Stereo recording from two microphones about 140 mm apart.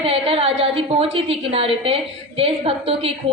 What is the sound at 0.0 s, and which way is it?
A woman's voice, 45° right (ahead or behind).